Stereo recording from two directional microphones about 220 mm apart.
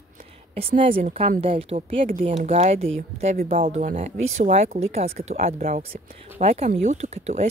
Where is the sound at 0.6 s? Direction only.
25° right (ahead or behind).